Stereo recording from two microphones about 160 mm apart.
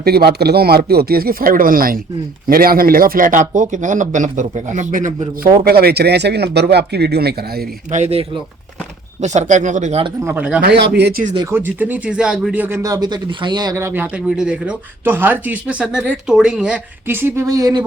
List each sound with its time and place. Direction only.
0.0 s a man's voice: 75° right (ahead or behind); by 5.5 s 55° right (ahead or behind)
5.6 s speech: 75° right (ahead or behind)
7.9 s a man's voice: 45° right (ahead or behind)
10.2 s speech: 10° right (ahead or behind)
10.6 s speech: 90° right
11.5 s speech: 10° right (ahead or behind)